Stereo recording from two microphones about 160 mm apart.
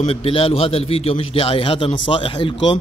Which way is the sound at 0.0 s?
35° left (ahead or behind).